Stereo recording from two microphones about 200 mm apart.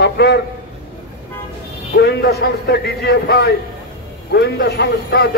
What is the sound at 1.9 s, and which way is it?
A man's voice, 55° left (ahead or behind).